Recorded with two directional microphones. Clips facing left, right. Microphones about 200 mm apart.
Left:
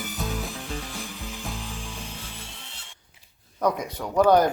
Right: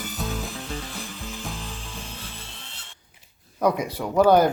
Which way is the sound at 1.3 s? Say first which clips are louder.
Even; 10° left (ahead or behind).